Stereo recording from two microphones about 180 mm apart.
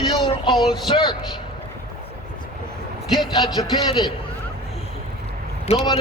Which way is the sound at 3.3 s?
20° left (ahead or behind).